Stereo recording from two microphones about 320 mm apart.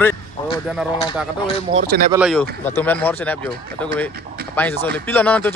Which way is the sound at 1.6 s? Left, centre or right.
Right.